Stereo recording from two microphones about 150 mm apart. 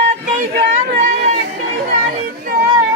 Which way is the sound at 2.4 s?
90° right.